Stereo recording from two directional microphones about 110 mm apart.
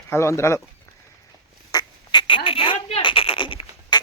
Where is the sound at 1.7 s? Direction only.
45° left (ahead or behind).